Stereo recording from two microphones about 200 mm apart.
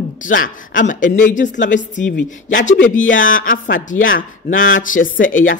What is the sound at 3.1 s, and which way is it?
Speech, 75° left (ahead or behind).